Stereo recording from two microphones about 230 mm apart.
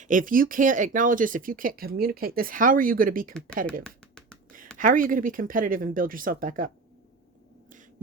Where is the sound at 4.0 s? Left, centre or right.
Centre.